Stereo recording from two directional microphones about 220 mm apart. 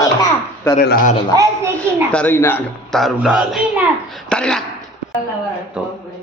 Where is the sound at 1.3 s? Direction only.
15° right (ahead or behind).